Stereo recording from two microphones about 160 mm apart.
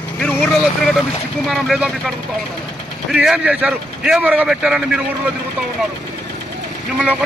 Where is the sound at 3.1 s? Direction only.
5° right (ahead or behind).